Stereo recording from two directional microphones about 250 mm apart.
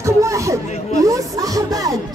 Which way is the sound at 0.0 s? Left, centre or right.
Centre.